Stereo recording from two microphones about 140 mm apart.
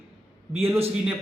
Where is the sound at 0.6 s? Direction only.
15° right (ahead or behind).